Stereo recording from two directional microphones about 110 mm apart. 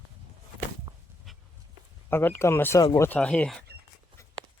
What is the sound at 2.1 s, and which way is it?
Speech, 20° left (ahead or behind).